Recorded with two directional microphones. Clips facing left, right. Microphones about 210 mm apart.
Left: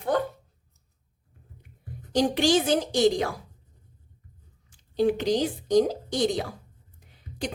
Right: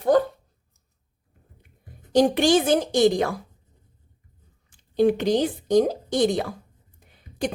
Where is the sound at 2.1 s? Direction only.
55° right (ahead or behind).